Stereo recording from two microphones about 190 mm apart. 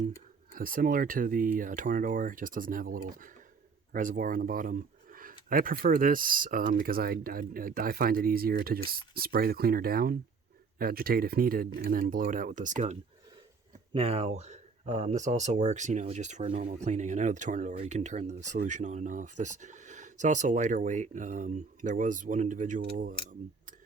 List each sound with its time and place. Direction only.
0.5 s speech: 50° right (ahead or behind)